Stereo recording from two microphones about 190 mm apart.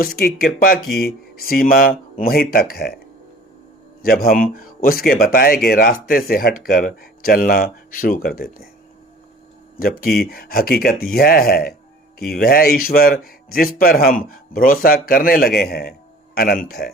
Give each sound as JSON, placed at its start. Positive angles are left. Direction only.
{"t": 0.0, "sound": "speech", "side_deg": 55}
{"t": 4.0, "sound": "speech", "side_deg": 50}
{"t": 9.7, "sound": "speech", "side_deg": 50}